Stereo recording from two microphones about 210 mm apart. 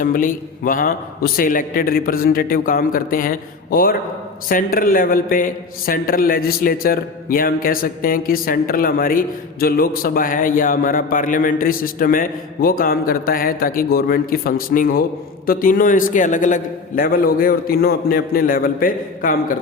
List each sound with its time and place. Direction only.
0.0 s a man's voice: 40° left (ahead or behind)